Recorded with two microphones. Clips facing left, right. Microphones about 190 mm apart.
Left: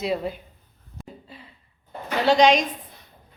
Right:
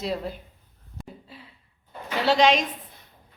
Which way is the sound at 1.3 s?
5° right (ahead or behind).